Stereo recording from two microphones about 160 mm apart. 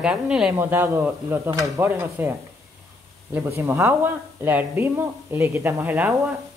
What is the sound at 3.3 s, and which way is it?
Speech, 15° right (ahead or behind).